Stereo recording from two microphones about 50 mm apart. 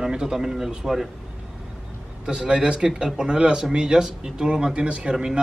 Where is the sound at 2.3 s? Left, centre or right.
Centre.